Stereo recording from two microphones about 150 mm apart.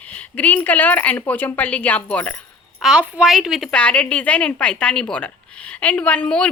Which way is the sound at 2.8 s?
5° right (ahead or behind).